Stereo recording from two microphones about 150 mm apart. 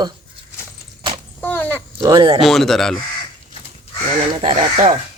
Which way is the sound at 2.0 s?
25° right (ahead or behind).